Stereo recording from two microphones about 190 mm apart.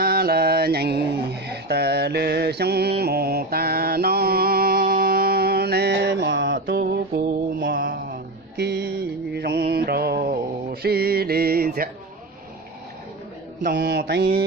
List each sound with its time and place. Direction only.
0.0 s mantra: 50° right (ahead or behind); by 6.7 s 70° right (ahead or behind)
6.7 s mantra: 55° right (ahead or behind)
13.7 s mantra: 60° right (ahead or behind)